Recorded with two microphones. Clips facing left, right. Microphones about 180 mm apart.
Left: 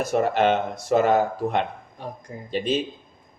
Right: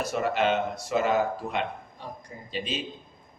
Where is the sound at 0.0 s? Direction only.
50° left (ahead or behind).